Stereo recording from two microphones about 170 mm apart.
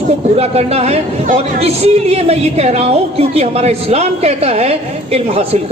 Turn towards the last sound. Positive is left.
turn(degrees=-35)  # may be behind; listen again after turning